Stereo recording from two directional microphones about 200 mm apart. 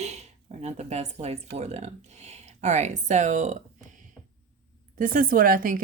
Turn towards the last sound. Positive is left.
turn(degrees=-45)  # may be behind; listen again after turning